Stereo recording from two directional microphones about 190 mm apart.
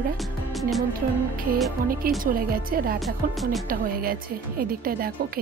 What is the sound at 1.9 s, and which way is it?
A woman's voice, 50° right (ahead or behind).